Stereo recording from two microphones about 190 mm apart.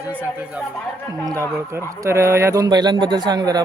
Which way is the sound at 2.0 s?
15° right (ahead or behind).